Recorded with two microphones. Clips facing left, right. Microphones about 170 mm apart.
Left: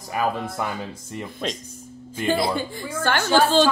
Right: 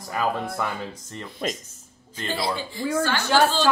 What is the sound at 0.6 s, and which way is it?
Speech, 10° left (ahead or behind).